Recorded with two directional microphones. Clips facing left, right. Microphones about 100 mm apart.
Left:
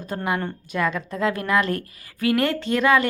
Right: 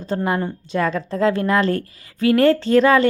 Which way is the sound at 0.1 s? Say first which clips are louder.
Right 4 dB; 25° right (ahead or behind).